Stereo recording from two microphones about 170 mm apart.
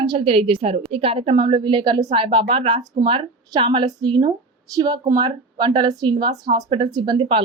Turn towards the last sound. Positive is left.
turn(degrees=-30)  # may be behind; listen again after turning